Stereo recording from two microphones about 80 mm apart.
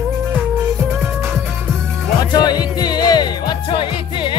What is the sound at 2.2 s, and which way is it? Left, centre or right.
Music, left.